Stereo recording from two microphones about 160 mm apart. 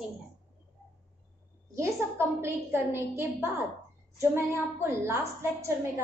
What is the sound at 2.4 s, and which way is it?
A woman's voice, 15° right (ahead or behind).